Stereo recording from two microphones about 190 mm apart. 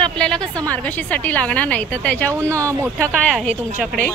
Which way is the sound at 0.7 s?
10° left (ahead or behind).